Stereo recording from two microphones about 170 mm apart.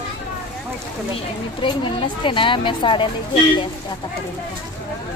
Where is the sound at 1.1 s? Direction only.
30° left (ahead or behind).